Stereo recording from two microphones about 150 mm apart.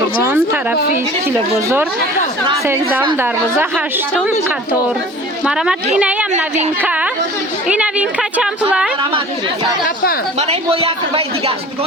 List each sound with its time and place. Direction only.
0.2 s a sound: 10° right (ahead or behind)
1.6 s a woman's voice: 15° right (ahead or behind)
5.5 s a woman's voice: 5° right (ahead or behind)
9.8 s a woman's voice: 75° left (ahead or behind)
10.3 s a woman's voice: 45° right (ahead or behind)